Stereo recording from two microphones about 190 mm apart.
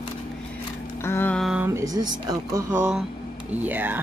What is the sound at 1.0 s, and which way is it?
Speech, 10° left (ahead or behind).